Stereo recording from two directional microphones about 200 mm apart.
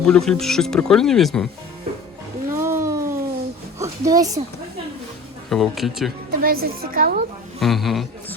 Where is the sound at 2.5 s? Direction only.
15° right (ahead or behind).